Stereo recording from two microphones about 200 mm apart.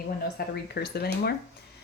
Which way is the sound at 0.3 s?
55° left (ahead or behind).